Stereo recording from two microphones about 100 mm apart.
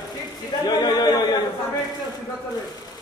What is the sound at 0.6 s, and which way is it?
Speech, 45° left (ahead or behind).